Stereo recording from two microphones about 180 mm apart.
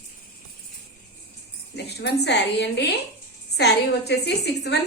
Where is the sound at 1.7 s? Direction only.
70° left (ahead or behind).